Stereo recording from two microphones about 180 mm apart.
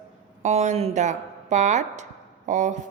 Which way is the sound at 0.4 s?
40° right (ahead or behind).